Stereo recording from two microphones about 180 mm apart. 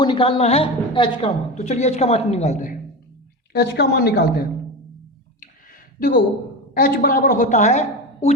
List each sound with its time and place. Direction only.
0.0 s a woman's voice: 30° left (ahead or behind)
3.5 s a woman's voice: 65° left (ahead or behind)
6.7 s a woman's voice: 55° left (ahead or behind)